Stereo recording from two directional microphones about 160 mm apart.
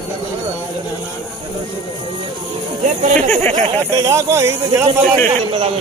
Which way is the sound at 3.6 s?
20° right (ahead or behind).